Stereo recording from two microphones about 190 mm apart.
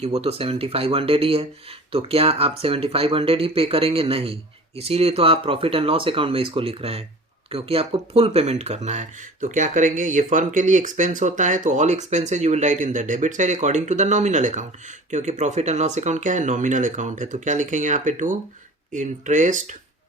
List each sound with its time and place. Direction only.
0.0 s speech: 35° right (ahead or behind)